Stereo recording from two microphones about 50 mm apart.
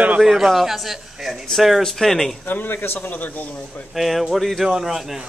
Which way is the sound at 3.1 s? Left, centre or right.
Left.